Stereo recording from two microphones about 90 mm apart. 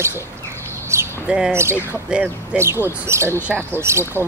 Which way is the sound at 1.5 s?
30° right (ahead or behind).